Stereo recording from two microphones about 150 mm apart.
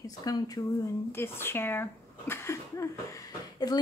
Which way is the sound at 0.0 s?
25° left (ahead or behind).